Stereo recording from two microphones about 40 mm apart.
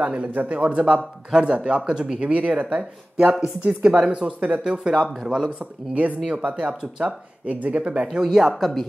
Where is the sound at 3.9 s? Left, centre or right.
Right.